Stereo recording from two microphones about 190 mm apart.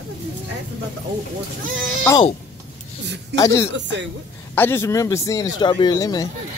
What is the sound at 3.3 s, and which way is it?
A man's voice, 15° left (ahead or behind).